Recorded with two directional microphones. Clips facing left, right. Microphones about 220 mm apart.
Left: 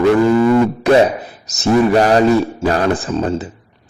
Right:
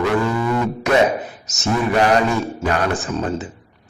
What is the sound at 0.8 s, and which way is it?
A man's voice, 30° left (ahead or behind).